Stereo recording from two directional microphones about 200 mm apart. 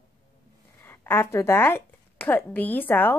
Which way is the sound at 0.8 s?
10° left (ahead or behind).